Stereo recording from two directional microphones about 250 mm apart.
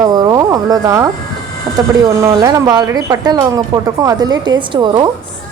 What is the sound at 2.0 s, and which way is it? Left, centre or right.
A woman's voice, centre.